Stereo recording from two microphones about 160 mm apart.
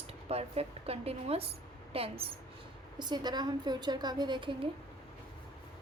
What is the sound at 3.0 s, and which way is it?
A woman's voice, 25° right (ahead or behind).